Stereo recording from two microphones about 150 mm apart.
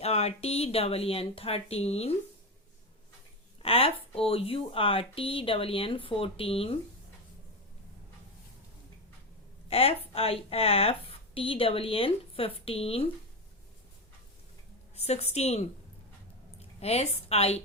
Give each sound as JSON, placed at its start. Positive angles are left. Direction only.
{"t": 0.0, "sound": "speech", "side_deg": 45}
{"t": 3.6, "sound": "speech", "side_deg": 40}
{"t": 9.6, "sound": "speech", "side_deg": 40}
{"t": 14.9, "sound": "a woman's voice", "side_deg": 45}
{"t": 16.6, "sound": "a sound", "side_deg": 45}
{"t": 17.2, "sound": "a woman's voice", "side_deg": 45}